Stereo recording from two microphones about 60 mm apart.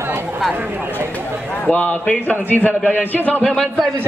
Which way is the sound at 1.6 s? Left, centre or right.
Left.